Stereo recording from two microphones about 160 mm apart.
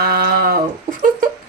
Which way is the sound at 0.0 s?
75° right (ahead or behind).